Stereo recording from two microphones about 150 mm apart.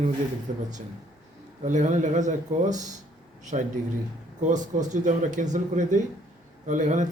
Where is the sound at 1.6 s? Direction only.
55° right (ahead or behind).